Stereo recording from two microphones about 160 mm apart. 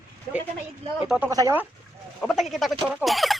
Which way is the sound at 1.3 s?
20° right (ahead or behind).